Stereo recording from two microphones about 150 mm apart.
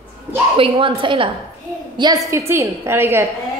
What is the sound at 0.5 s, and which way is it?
Speech, 35° right (ahead or behind).